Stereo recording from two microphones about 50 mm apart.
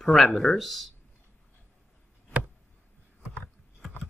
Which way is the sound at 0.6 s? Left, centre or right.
Centre.